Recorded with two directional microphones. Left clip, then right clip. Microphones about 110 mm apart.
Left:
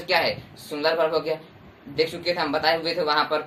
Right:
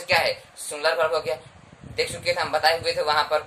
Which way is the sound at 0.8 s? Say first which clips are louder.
Even; 40° right (ahead or behind).